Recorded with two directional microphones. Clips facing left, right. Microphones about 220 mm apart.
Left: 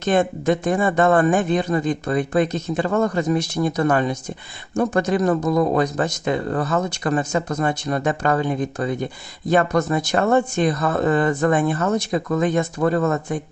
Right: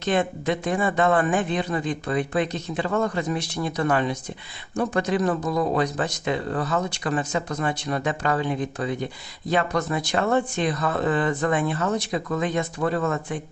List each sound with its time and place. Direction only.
0.0 s speech: 45° left (ahead or behind)